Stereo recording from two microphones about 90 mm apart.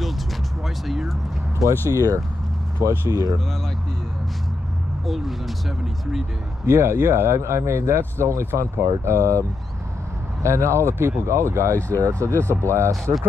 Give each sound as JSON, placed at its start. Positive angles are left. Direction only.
{"t": 0.8, "sound": "music", "side_deg": -5}
{"t": 1.6, "sound": "speech", "side_deg": -40}
{"t": 5.0, "sound": "speech", "side_deg": 0}
{"t": 6.6, "sound": "speech", "side_deg": -30}